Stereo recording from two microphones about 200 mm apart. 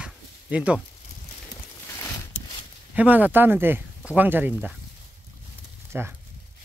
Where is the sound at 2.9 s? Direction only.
5° right (ahead or behind).